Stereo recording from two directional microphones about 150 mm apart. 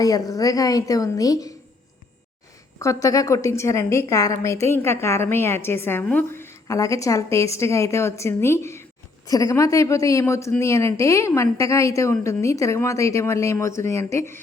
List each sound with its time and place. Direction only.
0.0 s a woman's voice: 25° left (ahead or behind)
2.7 s a woman's voice: 20° left (ahead or behind)